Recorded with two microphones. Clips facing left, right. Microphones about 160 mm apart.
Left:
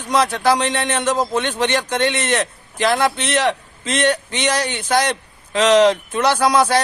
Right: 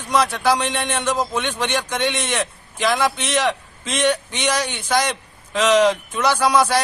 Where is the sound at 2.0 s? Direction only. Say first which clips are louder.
Left 4 dB; 10° right (ahead or behind).